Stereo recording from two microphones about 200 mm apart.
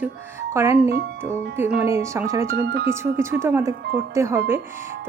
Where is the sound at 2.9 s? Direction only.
15° right (ahead or behind).